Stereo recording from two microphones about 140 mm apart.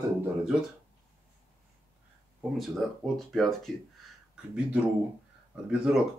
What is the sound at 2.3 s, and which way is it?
Speech, centre (ahead or behind).